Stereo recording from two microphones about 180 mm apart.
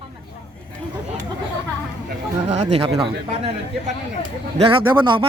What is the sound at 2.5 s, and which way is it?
Speech, 35° right (ahead or behind).